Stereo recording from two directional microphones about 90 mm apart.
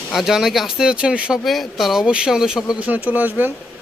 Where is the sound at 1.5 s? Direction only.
Centre (ahead or behind).